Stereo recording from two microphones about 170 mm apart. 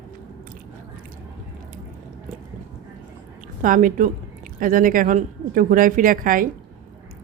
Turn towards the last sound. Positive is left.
turn(degrees=-55)  # may be behind; listen again after turning